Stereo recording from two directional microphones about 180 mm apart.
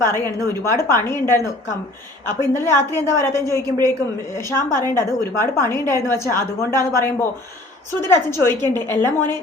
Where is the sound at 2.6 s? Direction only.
15° left (ahead or behind).